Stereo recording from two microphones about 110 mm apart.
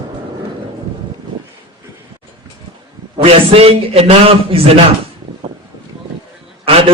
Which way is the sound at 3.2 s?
65° right (ahead or behind).